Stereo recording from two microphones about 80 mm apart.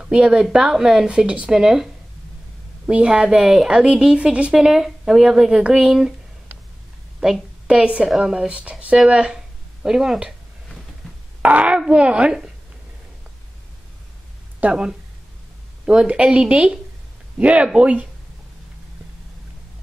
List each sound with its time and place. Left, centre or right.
0.0 s a woman's voice: centre
2.9 s a woman's voice: centre
7.2 s a woman's voice: centre
11.4 s a woman's voice: centre
14.6 s a woman's voice: centre